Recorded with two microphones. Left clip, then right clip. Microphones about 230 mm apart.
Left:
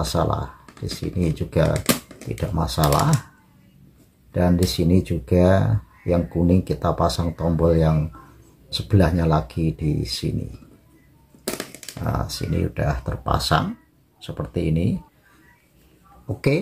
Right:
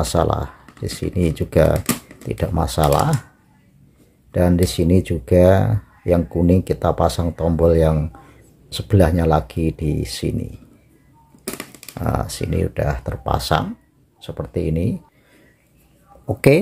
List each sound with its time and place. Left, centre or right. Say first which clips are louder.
0.0 s speech: right 4 dB; right
4.3 s speech: right 3 dB; right
12.0 s speech: right 4 dB; right